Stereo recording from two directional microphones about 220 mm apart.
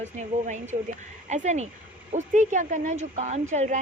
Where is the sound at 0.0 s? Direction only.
35° right (ahead or behind).